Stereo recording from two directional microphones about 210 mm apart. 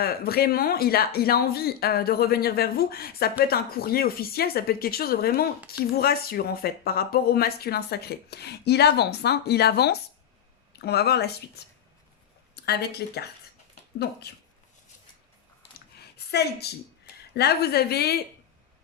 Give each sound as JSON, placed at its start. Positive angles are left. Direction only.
{"t": 0.0, "sound": "speech", "side_deg": 45}
{"t": 12.5, "sound": "speech", "side_deg": 50}
{"t": 16.3, "sound": "speech", "side_deg": 50}